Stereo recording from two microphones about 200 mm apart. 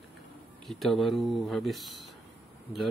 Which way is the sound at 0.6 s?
Centre (ahead or behind).